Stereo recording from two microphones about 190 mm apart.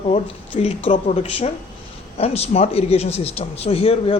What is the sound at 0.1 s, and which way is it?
Speech, 30° left (ahead or behind).